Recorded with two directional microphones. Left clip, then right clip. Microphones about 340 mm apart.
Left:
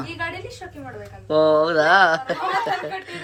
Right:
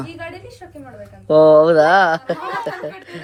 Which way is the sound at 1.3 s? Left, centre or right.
Centre.